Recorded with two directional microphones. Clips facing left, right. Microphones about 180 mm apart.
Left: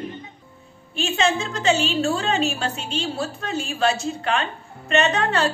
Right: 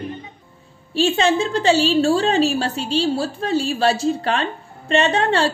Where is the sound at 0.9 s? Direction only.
35° right (ahead or behind).